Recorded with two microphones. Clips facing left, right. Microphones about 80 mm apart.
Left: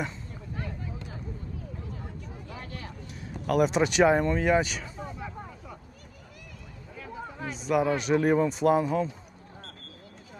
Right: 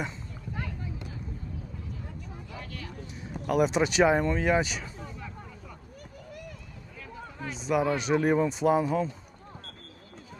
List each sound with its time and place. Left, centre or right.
2.6 s vehicle: left
3.4 s speech: centre
6.9 s a sound: centre
7.5 s speech: centre